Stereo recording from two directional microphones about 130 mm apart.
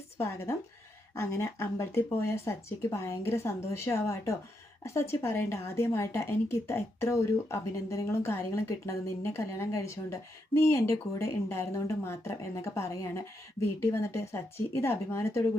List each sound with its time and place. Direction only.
0.2 s speech: 20° left (ahead or behind)